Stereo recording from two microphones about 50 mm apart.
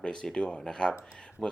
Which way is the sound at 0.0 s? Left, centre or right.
Centre.